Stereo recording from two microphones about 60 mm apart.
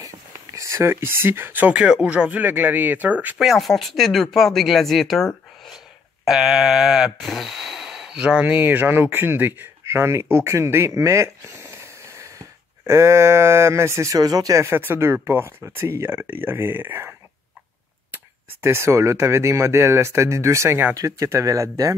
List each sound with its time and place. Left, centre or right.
0.6 s speech: right
1.7 s speech: centre
3.3 s speech: centre
6.2 s a sound: centre
7.2 s speech: centre; by 14.1 s right
14.1 s speech: right
14.6 s speech: right
18.1 s speech: right
20.9 s speech: right